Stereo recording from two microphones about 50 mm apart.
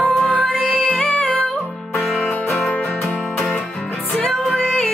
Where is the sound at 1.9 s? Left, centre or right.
Centre.